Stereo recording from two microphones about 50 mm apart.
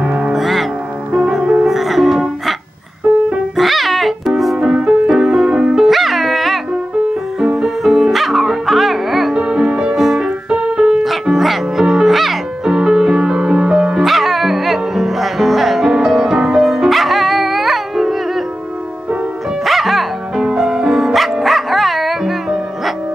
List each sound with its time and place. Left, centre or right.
0.0 s music: right
0.3 s music: centre
1.4 s music: right
1.7 s music: centre
9.3 s music: centre
19.6 s music: centre